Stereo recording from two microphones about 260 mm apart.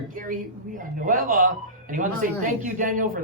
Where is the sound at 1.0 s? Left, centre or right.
Right.